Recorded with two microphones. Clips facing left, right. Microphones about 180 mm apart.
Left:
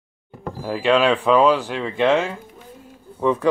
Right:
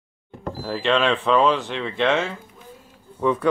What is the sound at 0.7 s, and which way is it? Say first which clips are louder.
Speech: left 3 dB; 5° left (ahead or behind).